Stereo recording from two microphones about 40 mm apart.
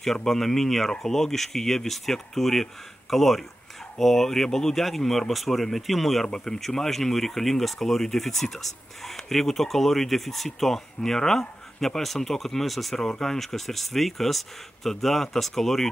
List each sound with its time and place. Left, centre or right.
0.0 s speech: centre
6.2 s speech: centre